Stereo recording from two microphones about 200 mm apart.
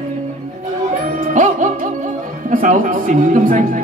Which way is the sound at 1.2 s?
40° right (ahead or behind).